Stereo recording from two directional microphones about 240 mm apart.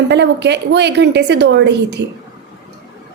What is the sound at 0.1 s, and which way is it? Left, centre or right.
A woman's voice, right.